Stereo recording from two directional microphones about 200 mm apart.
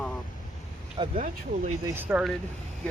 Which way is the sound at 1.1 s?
40° right (ahead or behind).